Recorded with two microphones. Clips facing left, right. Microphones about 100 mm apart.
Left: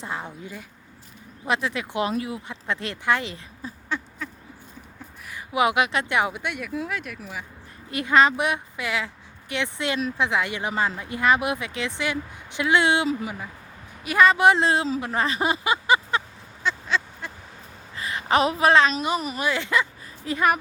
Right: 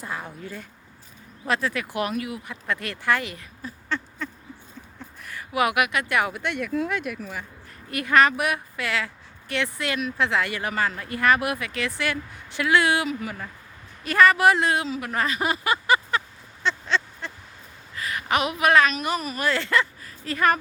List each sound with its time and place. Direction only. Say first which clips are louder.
0.0 s speech: left 1 dB; 25° left (ahead or behind)
3.8 s a sound: right 1 dB; 10° left (ahead or behind)
5.3 s speech: left 1 dB; 20° left (ahead or behind)
6.4 s speech: right 3 dB; 5° left (ahead or behind)
7.9 s speech: even; 20° left (ahead or behind)
16.6 s a sound: right 1 dB; 10° left (ahead or behind)
17.9 s a woman's voice: left 3 dB; 25° left (ahead or behind)